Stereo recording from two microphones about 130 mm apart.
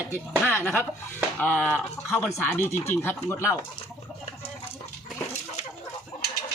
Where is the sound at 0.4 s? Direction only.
15° left (ahead or behind).